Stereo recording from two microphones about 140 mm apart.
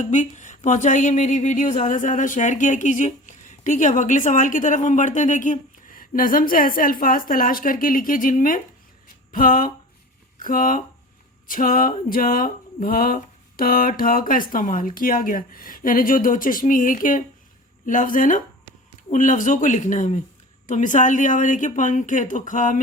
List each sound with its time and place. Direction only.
0.0 s speech: 60° left (ahead or behind)
9.3 s a sound: 80° left
17.8 s speech: 70° left (ahead or behind)